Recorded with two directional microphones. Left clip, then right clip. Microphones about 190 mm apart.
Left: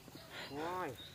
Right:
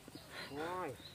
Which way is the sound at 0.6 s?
60° left (ahead or behind).